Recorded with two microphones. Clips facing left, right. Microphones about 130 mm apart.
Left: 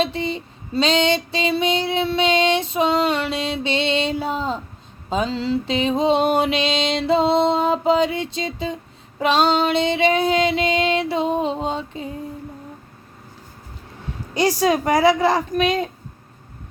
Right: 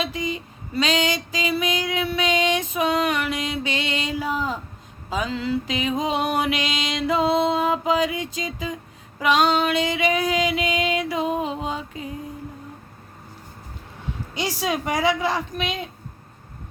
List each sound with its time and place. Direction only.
0.0 s a sound: 30° left (ahead or behind)
5.0 s mantra: 30° left (ahead or behind)
14.3 s a woman's voice: 40° left (ahead or behind)